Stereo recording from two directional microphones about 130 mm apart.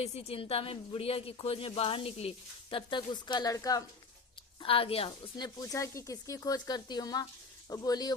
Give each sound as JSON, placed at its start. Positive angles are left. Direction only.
{"t": 0.0, "sound": "a woman's voice", "side_deg": 55}
{"t": 4.6, "sound": "speech", "side_deg": 45}